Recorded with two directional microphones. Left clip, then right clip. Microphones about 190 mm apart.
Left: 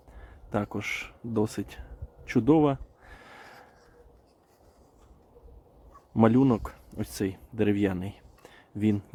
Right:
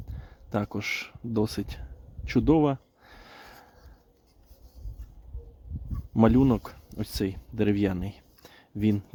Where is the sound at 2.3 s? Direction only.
15° right (ahead or behind).